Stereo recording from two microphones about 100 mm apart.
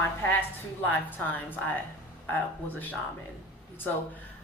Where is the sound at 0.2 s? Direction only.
20° left (ahead or behind).